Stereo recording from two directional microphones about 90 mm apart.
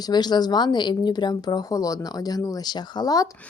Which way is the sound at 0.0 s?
50° left (ahead or behind).